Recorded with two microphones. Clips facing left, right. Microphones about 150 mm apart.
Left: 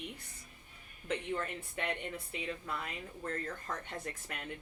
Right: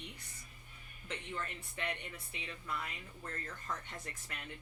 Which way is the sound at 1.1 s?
55° left (ahead or behind).